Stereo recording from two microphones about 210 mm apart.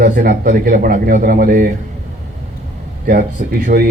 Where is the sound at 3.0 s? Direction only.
45° right (ahead or behind).